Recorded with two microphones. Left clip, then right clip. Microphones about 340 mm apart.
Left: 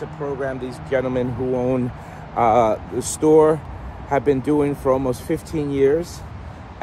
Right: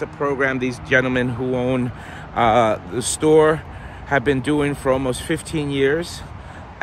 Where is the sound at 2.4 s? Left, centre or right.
Right.